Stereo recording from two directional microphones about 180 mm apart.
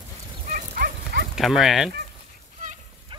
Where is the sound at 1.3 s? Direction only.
Centre (ahead or behind).